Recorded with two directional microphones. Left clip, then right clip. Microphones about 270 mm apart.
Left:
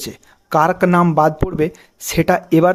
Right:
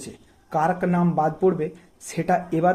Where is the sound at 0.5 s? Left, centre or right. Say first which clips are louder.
Left 9 dB; left.